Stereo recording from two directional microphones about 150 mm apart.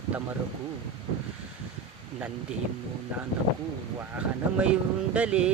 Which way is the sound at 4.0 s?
10° right (ahead or behind).